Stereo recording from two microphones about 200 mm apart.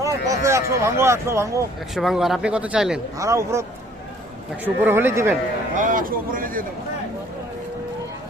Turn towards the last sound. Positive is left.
turn(degrees=-45)  # may be behind; listen again after turning